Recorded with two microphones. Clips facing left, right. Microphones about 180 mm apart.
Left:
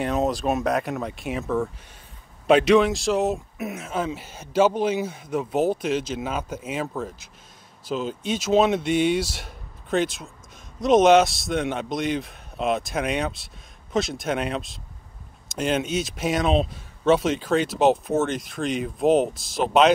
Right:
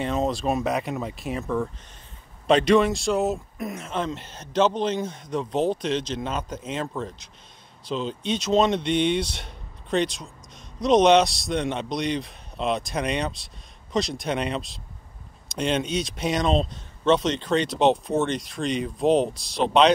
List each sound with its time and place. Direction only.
0.0 s speech: centre (ahead or behind)